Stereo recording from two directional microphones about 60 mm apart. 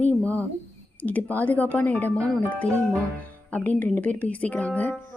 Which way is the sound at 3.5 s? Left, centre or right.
Left.